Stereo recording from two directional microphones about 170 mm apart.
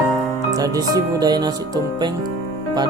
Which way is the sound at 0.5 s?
20° right (ahead or behind).